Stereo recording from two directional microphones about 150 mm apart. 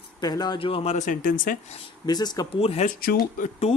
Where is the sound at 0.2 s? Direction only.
25° left (ahead or behind).